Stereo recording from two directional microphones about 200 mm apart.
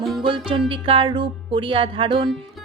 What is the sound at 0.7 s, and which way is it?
Speech, 25° right (ahead or behind).